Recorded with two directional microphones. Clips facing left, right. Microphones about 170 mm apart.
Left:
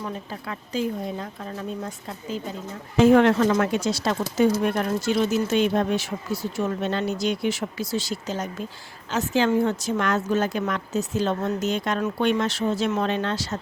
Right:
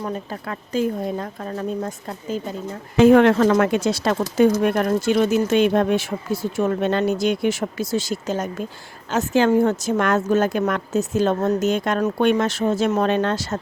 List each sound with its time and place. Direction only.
0.0 s a woman's voice: 50° right (ahead or behind)
3.0 s a woman's voice: 60° right (ahead or behind)